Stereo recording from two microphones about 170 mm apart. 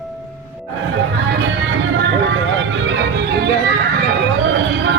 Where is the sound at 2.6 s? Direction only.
85° right.